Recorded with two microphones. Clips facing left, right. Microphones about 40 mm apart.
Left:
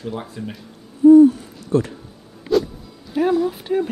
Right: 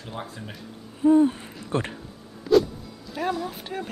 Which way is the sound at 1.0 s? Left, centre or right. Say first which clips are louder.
Left 9 dB; right.